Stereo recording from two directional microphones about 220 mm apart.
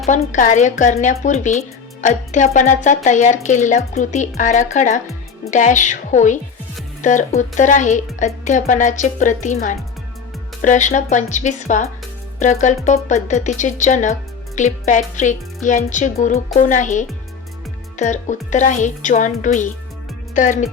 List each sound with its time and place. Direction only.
0.0 s speech: 30° left (ahead or behind)